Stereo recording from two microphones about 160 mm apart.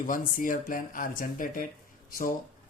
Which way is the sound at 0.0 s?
55° left (ahead or behind).